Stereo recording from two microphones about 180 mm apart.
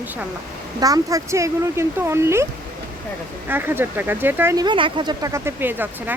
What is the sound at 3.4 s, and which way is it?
Speech, 10° right (ahead or behind).